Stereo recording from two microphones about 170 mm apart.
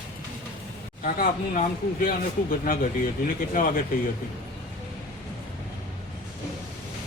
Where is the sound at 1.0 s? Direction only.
55° left (ahead or behind).